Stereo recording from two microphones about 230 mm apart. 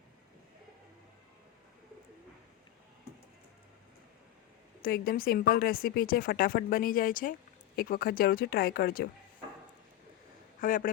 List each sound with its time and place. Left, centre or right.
4.8 s a woman's voice: left
10.6 s a woman's voice: left